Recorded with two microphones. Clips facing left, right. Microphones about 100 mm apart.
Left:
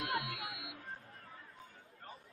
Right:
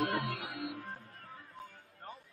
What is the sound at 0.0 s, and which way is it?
Music, 50° right (ahead or behind).